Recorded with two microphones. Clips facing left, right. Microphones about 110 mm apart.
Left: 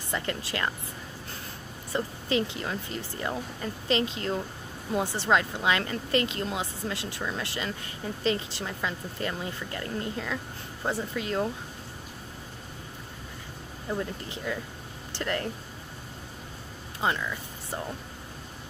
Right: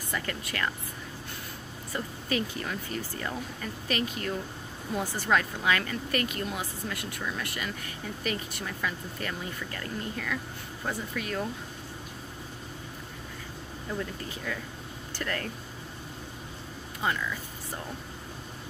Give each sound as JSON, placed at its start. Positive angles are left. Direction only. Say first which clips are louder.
{"t": 0.1, "sound": "speech", "louder": "left 3 dB", "side_deg": 25}
{"t": 1.9, "sound": "speech", "louder": "left 3 dB", "side_deg": 25}
{"t": 13.9, "sound": "speech", "louder": "left 2 dB", "side_deg": 20}
{"t": 17.0, "sound": "speech", "louder": "left 2 dB", "side_deg": 25}